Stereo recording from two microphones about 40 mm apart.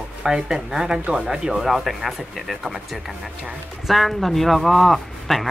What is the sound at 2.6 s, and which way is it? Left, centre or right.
Speech, centre.